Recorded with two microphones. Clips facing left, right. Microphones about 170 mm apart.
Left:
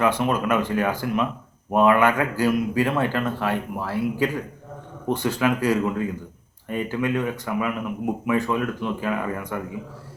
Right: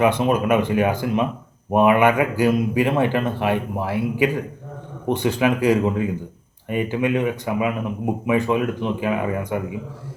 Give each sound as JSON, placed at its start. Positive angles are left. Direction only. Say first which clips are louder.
{"t": 0.0, "sound": "a man's voice", "louder": "right 3 dB", "side_deg": -15}